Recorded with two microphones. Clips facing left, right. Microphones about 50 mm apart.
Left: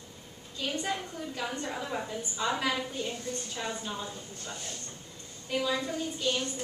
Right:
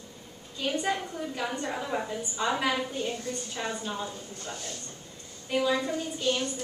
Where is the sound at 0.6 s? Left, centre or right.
Centre.